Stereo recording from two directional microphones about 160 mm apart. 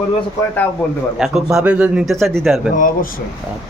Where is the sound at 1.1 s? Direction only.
5° right (ahead or behind).